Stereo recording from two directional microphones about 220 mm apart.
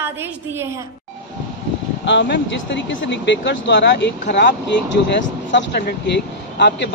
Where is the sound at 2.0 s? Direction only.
55° left (ahead or behind).